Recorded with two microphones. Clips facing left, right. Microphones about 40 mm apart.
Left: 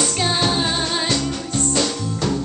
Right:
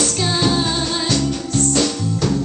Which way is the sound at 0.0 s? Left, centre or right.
Centre.